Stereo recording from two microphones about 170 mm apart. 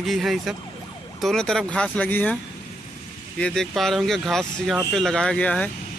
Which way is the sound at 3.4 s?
5° left (ahead or behind).